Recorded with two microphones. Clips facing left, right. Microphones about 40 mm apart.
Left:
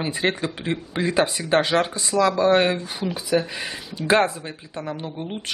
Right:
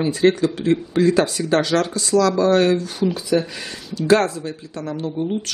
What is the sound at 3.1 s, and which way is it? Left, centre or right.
Speech, centre.